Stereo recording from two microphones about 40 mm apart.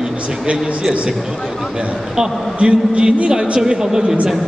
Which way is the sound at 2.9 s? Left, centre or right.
Right.